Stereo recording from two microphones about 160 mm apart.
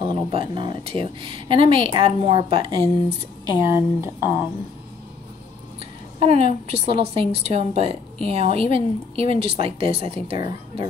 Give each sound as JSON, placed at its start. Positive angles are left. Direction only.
{"t": 0.0, "sound": "a woman's voice", "side_deg": -35}
{"t": 3.6, "sound": "speech", "side_deg": -15}
{"t": 6.1, "sound": "a woman's voice", "side_deg": -35}